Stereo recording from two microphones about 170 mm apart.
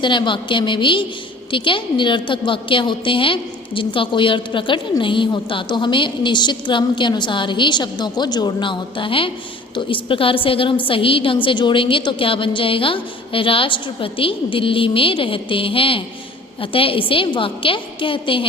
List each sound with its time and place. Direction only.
0.0 s a woman's voice: 30° left (ahead or behind)